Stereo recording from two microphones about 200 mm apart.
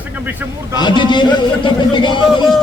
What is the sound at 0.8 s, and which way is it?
Speech, 20° left (ahead or behind).